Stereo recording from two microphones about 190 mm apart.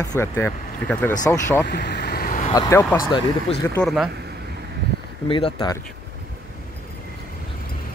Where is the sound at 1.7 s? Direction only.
60° left (ahead or behind); by 2.5 s 45° left (ahead or behind).